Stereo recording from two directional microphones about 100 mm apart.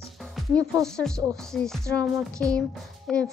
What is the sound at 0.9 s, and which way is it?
Speech, 5° left (ahead or behind).